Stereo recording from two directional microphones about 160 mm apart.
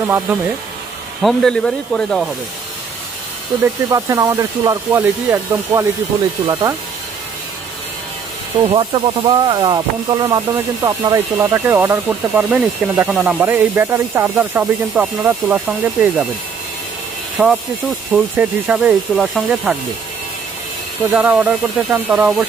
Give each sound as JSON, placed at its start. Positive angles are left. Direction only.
{"t": 0.1, "sound": "speech", "side_deg": -15}
{"t": 1.2, "sound": "speech", "side_deg": 0}
{"t": 3.6, "sound": "speech", "side_deg": -20}
{"t": 8.7, "sound": "speech", "side_deg": -30}
{"t": 11.3, "sound": "speech", "side_deg": -15}
{"t": 17.3, "sound": "speech", "side_deg": -5}
{"t": 21.1, "sound": "speech", "side_deg": -10}